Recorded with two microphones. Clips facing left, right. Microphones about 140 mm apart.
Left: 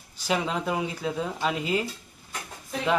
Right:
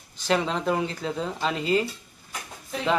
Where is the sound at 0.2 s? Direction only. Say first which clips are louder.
Right 2 dB; 5° left (ahead or behind).